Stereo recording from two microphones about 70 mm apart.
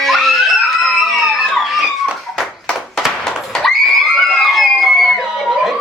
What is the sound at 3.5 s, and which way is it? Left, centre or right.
Screaming, centre.